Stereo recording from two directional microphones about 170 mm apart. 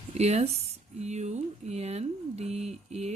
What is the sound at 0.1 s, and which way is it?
Speech, 40° right (ahead or behind).